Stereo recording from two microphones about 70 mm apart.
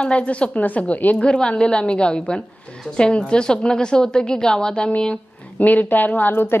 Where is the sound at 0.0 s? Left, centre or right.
Centre.